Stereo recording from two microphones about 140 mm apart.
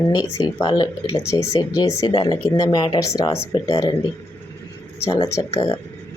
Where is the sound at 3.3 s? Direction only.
45° left (ahead or behind).